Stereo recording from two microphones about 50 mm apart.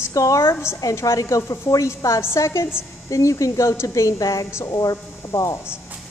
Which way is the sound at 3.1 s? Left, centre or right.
Left.